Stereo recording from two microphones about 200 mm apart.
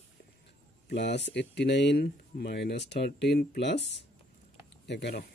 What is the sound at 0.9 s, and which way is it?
Speech, 60° left (ahead or behind).